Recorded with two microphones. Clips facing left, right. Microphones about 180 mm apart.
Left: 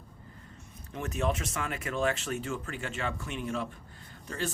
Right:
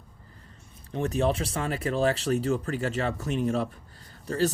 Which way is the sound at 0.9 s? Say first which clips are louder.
Right 6 dB; 35° right (ahead or behind).